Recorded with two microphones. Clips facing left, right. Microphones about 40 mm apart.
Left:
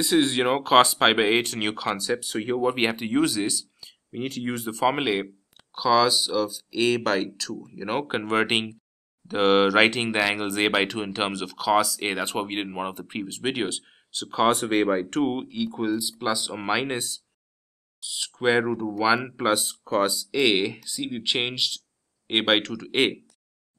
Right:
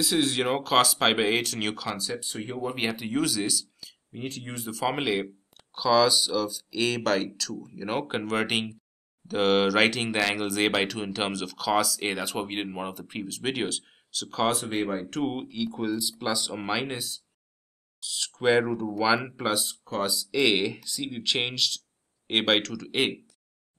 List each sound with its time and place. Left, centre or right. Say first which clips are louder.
0.0 s speech: left 4 dB; centre
2.6 s speech: left 4 dB; left
3.2 s speech: left 4 dB; centre
4.1 s speech: left 5 dB; left
4.7 s speech: left 3 dB; centre
14.7 s speech: left 6 dB; left
15.2 s speech: left 3 dB; centre
18.0 s speech: left 1 dB; centre